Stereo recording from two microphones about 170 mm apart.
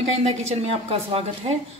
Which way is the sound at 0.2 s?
40° right (ahead or behind).